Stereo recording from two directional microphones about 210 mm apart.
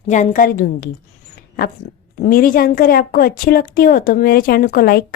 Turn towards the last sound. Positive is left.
turn(degrees=45)  # may be behind; listen again after turning